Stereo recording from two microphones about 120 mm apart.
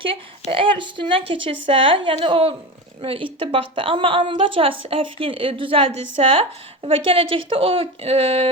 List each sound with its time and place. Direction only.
0.0 s a woman's voice: 45° right (ahead or behind)